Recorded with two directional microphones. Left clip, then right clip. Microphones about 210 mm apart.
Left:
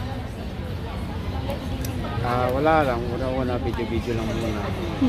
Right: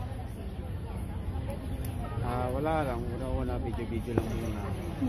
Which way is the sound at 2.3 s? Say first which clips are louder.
Left 11 dB; 5° right (ahead or behind).